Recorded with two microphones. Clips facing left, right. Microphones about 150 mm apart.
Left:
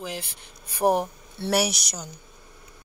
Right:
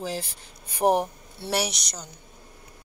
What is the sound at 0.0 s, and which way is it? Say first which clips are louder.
Speech: right 3 dB; 40° right (ahead or behind).